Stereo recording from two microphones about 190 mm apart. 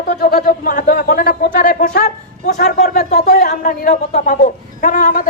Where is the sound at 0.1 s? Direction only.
50° left (ahead or behind).